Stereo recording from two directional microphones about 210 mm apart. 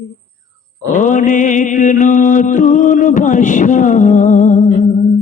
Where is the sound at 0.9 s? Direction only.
35° left (ahead or behind).